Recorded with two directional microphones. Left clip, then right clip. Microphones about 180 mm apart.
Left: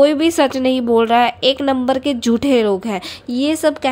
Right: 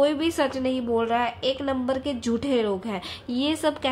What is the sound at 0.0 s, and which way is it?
Speech, 40° left (ahead or behind).